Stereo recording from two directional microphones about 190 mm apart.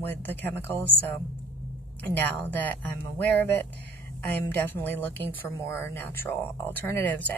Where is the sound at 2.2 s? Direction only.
10° left (ahead or behind).